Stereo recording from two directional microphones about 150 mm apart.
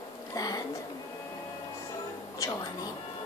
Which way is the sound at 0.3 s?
25° left (ahead or behind).